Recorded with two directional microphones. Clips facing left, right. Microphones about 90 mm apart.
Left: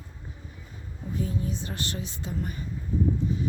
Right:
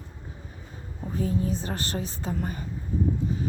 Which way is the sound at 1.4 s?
40° right (ahead or behind).